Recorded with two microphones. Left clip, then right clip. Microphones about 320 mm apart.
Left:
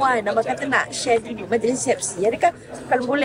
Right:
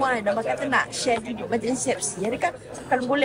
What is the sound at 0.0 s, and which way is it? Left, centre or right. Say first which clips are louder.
Speech: left 4 dB; left.